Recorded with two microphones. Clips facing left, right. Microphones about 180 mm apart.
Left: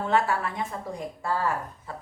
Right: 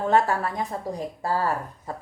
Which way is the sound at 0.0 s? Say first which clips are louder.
Right 3 dB; 40° right (ahead or behind).